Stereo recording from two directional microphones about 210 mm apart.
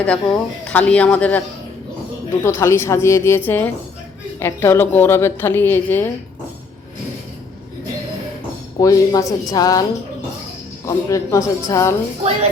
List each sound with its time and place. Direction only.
0.0 s a woman's voice: 5° left (ahead or behind)
2.4 s a woman's voice: 10° left (ahead or behind)
8.8 s a woman's voice: 15° left (ahead or behind)
10.8 s a woman's voice: 15° left (ahead or behind)